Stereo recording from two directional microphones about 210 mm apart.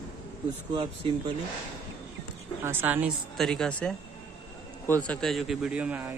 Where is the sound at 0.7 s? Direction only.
25° right (ahead or behind).